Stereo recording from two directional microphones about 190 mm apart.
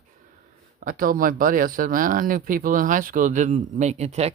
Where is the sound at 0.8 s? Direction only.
45° right (ahead or behind).